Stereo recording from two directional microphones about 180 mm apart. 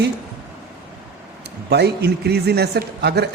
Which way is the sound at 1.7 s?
65° right (ahead or behind).